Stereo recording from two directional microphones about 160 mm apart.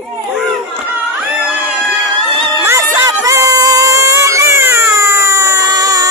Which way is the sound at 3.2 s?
20° right (ahead or behind).